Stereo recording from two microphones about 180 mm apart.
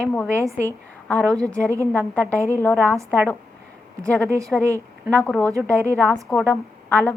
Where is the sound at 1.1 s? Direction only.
10° left (ahead or behind).